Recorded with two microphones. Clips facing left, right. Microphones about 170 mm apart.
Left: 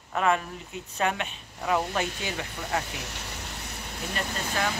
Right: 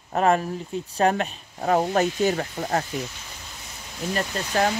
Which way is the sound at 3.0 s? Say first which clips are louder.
Right 5 dB; 75° left (ahead or behind).